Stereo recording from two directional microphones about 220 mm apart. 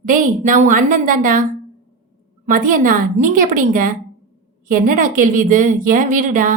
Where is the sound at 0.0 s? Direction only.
35° right (ahead or behind).